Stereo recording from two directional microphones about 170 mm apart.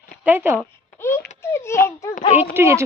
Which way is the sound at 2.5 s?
15° right (ahead or behind).